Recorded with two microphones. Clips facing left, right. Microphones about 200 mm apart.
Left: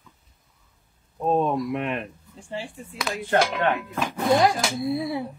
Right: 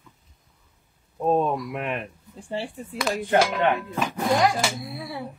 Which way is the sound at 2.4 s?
35° right (ahead or behind).